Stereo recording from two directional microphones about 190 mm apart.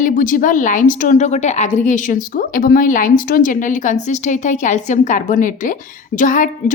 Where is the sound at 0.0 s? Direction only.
45° left (ahead or behind).